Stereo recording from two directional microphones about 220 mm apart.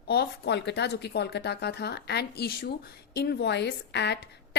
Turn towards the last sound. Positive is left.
turn(degrees=50)  # may be behind; listen again after turning